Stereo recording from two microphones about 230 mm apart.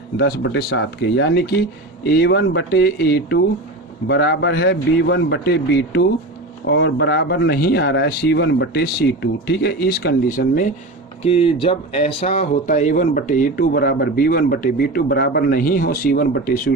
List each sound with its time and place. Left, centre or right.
0.2 s speech: left
11.2 s speech: left